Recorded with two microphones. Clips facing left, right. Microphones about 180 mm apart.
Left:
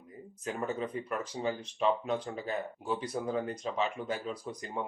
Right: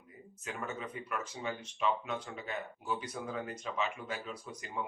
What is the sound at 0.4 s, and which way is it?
Speech, 35° left (ahead or behind).